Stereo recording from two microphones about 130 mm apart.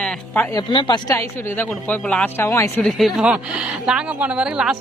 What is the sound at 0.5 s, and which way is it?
Speech, 35° left (ahead or behind).